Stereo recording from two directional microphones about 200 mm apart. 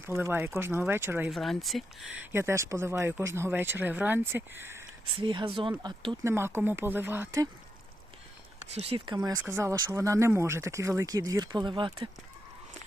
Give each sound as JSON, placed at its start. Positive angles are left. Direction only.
{"t": 0.0, "sound": "speech", "side_deg": -10}
{"t": 1.3, "sound": "speech", "side_deg": 0}
{"t": 2.3, "sound": "speech", "side_deg": -15}
{"t": 5.1, "sound": "speech", "side_deg": -25}
{"t": 6.2, "sound": "speech", "side_deg": -10}
{"t": 8.7, "sound": "speech", "side_deg": -30}